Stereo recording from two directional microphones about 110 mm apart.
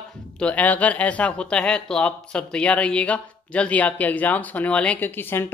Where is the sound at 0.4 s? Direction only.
15° left (ahead or behind).